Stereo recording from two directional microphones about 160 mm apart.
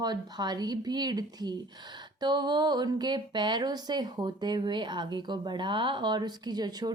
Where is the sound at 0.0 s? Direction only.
25° right (ahead or behind).